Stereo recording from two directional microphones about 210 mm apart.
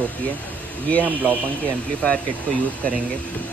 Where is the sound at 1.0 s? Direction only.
10° right (ahead or behind).